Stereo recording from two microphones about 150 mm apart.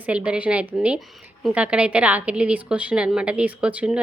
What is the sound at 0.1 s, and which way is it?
A woman's voice, 10° right (ahead or behind).